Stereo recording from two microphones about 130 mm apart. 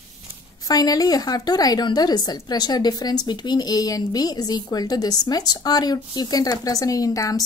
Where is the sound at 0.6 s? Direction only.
30° left (ahead or behind).